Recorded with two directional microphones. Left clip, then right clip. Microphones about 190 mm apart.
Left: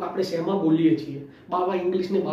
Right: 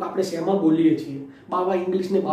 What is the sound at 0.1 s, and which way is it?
A woman's voice, centre (ahead or behind).